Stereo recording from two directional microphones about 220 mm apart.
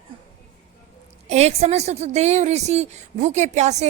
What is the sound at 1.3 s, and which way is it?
A woman's voice, 30° right (ahead or behind).